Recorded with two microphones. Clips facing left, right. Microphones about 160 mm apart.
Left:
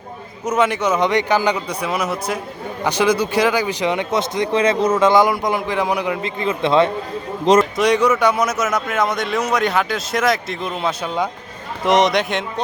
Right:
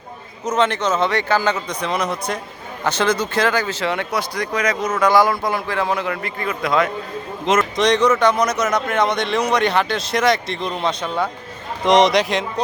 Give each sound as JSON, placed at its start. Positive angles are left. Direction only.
{"t": 0.4, "sound": "speech", "side_deg": 10}
{"t": 7.8, "sound": "speech", "side_deg": 10}